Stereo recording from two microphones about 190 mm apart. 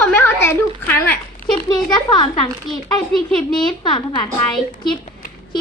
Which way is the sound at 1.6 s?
20° left (ahead or behind).